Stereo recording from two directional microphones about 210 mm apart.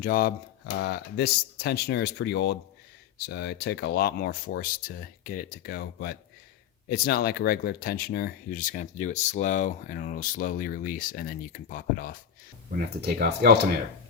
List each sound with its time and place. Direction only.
0.0 s speech: 45° left (ahead or behind)
13.0 s speech: 50° right (ahead or behind)